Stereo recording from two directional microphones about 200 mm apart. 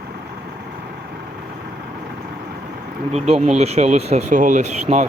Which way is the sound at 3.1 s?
30° right (ahead or behind).